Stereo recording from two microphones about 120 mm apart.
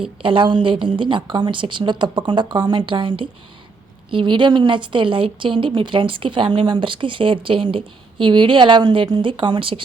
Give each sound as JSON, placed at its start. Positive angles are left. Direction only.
{"t": 0.2, "sound": "a woman's voice", "side_deg": -45}